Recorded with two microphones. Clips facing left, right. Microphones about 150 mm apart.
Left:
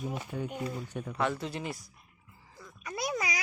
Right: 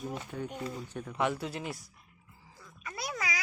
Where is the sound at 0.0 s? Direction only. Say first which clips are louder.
Left 2 dB; 10° left (ahead or behind).